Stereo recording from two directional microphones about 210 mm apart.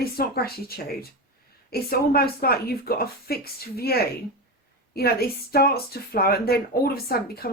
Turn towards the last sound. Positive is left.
turn(degrees=45)  # may be behind; listen again after turning